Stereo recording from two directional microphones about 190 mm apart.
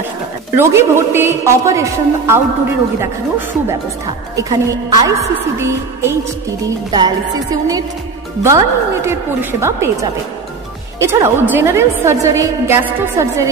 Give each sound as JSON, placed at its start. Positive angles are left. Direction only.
{"t": 0.6, "sound": "a woman's voice", "side_deg": -15}
{"t": 6.9, "sound": "music", "side_deg": -20}
{"t": 8.4, "sound": "a woman's voice", "side_deg": -15}